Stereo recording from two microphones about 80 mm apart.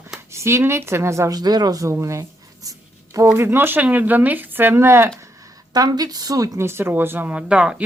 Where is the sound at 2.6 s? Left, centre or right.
Right.